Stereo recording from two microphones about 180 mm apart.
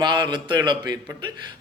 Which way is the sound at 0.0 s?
25° right (ahead or behind).